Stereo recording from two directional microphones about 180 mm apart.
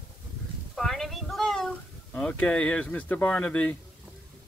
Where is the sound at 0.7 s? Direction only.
5° left (ahead or behind).